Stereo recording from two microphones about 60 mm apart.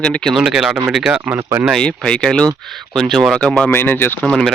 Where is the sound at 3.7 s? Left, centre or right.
Left.